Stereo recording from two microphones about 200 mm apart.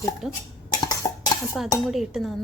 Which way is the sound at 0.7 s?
20° left (ahead or behind).